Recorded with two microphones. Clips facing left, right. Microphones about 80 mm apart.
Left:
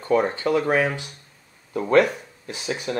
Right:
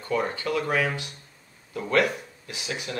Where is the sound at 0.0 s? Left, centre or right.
Left.